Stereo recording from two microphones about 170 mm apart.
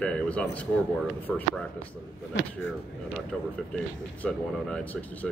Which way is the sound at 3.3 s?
5° left (ahead or behind).